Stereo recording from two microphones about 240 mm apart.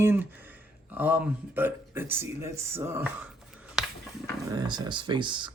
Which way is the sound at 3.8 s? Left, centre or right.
Centre.